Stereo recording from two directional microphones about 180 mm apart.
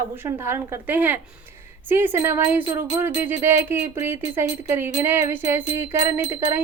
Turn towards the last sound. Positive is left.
turn(degrees=-15)  # may be behind; listen again after turning